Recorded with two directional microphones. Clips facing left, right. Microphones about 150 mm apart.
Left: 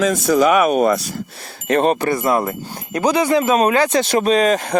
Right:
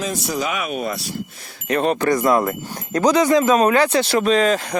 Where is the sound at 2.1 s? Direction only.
25° left (ahead or behind).